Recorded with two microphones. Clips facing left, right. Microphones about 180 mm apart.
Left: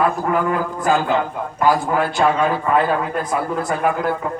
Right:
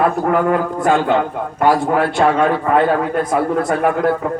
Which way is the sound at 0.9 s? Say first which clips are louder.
Right 3 dB; 25° right (ahead or behind).